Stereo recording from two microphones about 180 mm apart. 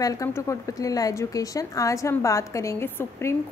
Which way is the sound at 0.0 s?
20° left (ahead or behind).